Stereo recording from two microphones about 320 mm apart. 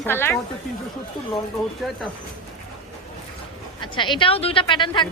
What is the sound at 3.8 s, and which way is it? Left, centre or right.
A woman's voice, centre.